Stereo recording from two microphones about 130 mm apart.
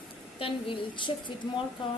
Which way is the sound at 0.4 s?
40° left (ahead or behind).